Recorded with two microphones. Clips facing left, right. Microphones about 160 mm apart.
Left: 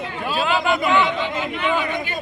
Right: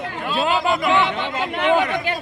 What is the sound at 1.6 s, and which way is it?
Speech, 70° right (ahead or behind).